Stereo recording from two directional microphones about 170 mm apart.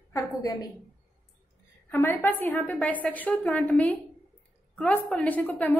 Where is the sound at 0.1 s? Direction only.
20° left (ahead or behind).